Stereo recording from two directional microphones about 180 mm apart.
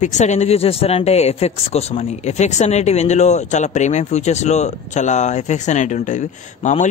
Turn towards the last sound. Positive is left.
turn(degrees=40)  # may be behind; listen again after turning